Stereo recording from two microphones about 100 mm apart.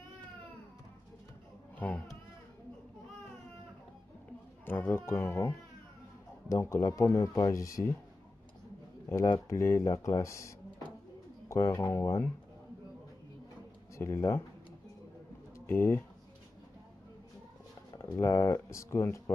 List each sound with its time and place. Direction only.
1.8 s speech: 15° left (ahead or behind)
4.6 s speech: 20° left (ahead or behind)
6.5 s speech: 30° left (ahead or behind)
9.5 s speech: 30° left (ahead or behind)
13.9 s speech: 25° left (ahead or behind)
15.6 s speech: 25° left (ahead or behind)
18.1 s speech: 30° left (ahead or behind)